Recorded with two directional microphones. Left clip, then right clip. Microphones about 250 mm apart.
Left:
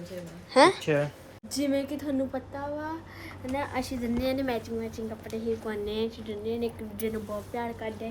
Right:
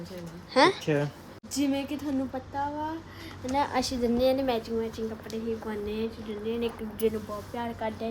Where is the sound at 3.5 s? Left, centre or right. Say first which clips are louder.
Right 5 dB; centre.